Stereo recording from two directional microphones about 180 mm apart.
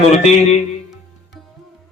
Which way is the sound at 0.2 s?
35° left (ahead or behind).